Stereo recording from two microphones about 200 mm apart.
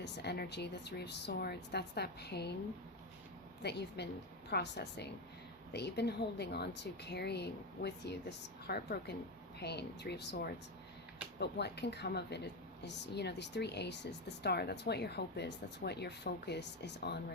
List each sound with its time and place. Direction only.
0.0 s speech: 55° left (ahead or behind)
3.6 s speech: 55° left (ahead or behind)